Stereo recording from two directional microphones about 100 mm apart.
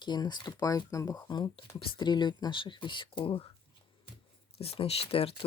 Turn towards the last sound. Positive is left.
turn(degrees=70)  # may be behind; listen again after turning